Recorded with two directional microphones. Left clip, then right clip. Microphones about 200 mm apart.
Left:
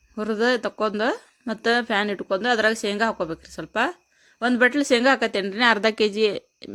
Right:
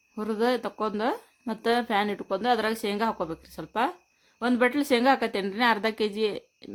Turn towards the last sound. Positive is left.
turn(degrees=15)  # may be behind; listen again after turning